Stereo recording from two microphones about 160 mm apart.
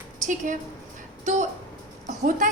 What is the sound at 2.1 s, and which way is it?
Speech, 55° right (ahead or behind).